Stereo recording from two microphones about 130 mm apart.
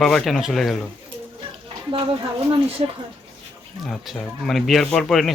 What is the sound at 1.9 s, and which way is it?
Speech, 40° right (ahead or behind).